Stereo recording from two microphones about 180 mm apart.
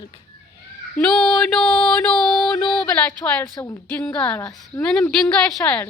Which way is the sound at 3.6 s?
10° left (ahead or behind).